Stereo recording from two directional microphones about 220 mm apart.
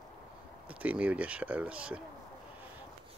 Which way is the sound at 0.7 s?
5° right (ahead or behind).